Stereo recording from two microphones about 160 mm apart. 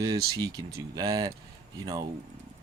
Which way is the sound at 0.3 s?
25° right (ahead or behind).